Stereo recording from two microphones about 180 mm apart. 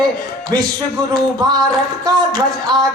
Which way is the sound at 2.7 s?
25° right (ahead or behind).